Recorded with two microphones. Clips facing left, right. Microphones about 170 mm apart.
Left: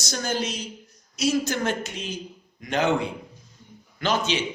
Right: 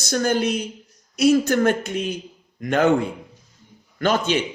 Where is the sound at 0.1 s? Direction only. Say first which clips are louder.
Right 8 dB; 55° right (ahead or behind).